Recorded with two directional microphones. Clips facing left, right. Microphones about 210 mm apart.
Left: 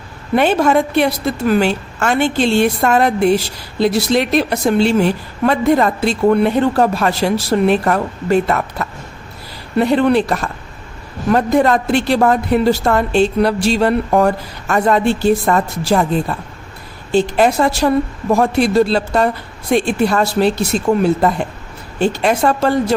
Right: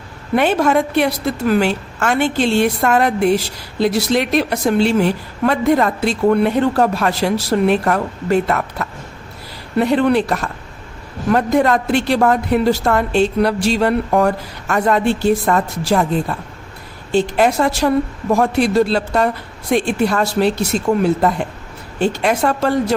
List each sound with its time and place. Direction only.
0.3 s a woman's voice: 30° left (ahead or behind)
17.1 s a woman's voice: 30° left (ahead or behind)